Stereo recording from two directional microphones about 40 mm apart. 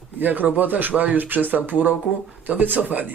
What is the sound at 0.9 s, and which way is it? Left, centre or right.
Speech, right.